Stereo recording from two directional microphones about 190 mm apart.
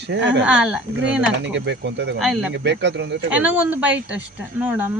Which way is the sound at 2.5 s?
65° right (ahead or behind).